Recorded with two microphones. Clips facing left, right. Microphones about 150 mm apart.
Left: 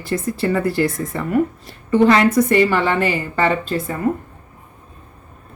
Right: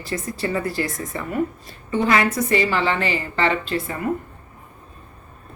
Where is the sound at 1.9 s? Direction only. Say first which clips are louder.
Left 6 dB; 55° left (ahead or behind).